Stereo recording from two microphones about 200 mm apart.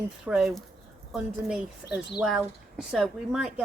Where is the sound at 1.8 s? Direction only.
10° left (ahead or behind).